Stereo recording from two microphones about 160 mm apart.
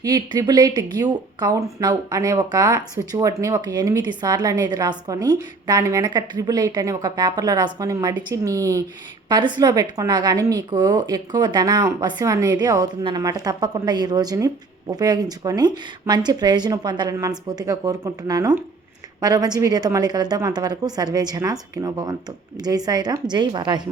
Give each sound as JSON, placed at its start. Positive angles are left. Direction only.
{"t": 0.0, "sound": "speech", "side_deg": -25}